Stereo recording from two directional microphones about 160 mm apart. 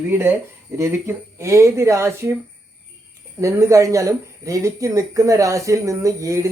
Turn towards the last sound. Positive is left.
turn(degrees=-20)  # may be behind; listen again after turning